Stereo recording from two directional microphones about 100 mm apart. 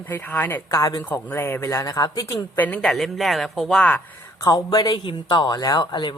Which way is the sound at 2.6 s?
15° left (ahead or behind).